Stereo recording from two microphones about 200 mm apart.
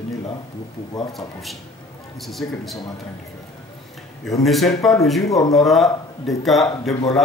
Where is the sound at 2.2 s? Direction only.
Centre (ahead or behind).